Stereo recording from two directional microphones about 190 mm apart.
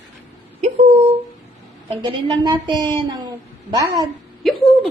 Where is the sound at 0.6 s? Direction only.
35° right (ahead or behind).